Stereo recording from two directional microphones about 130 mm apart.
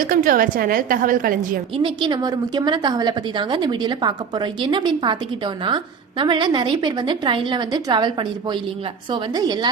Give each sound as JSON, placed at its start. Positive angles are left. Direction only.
{"t": 0.0, "sound": "a woman's voice", "side_deg": -90}
{"t": 1.8, "sound": "a woman's voice", "side_deg": -35}